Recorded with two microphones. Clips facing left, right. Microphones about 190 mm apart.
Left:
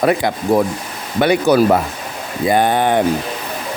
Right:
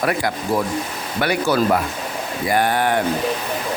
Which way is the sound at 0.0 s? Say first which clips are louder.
Left 5 dB; 20° left (ahead or behind).